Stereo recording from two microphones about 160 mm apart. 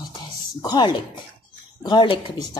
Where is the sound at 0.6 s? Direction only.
25° left (ahead or behind).